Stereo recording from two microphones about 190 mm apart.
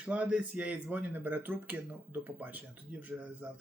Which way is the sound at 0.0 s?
5° right (ahead or behind).